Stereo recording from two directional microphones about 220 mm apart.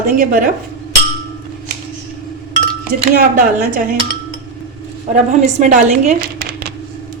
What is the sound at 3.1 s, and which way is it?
Speech, 40° right (ahead or behind).